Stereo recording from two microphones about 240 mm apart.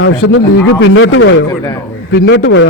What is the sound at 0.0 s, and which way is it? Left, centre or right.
A man's voice, left.